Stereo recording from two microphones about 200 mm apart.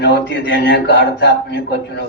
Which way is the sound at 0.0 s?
60° left (ahead or behind).